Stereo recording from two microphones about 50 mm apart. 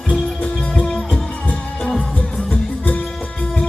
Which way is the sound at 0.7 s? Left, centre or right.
Centre.